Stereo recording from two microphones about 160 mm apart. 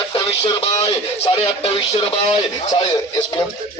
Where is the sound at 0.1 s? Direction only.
35° left (ahead or behind).